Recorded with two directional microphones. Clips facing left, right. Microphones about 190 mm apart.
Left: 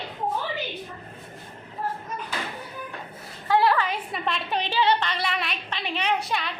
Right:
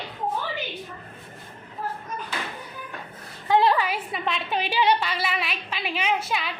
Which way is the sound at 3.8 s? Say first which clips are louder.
Right 1 dB; 5° right (ahead or behind).